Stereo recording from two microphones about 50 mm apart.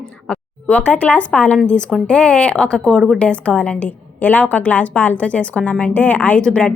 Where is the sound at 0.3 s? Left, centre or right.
Left.